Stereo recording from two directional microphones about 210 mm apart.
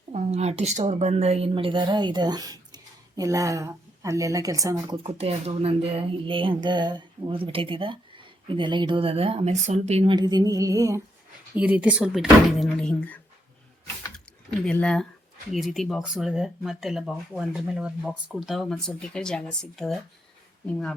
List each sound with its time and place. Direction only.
0.1 s a woman's voice: 30° right (ahead or behind); by 4.9 s 15° right (ahead or behind)
5.0 s speech: 30° right (ahead or behind); by 13.1 s 5° left (ahead or behind)
14.6 s speech: 5° left (ahead or behind)